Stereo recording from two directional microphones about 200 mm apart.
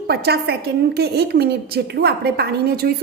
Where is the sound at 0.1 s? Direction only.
55° right (ahead or behind).